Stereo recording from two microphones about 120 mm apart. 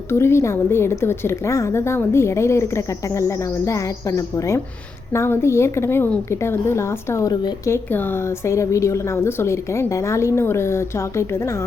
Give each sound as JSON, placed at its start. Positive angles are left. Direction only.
{"t": 0.1, "sound": "a woman's voice", "side_deg": 20}
{"t": 7.9, "sound": "a woman's voice", "side_deg": 15}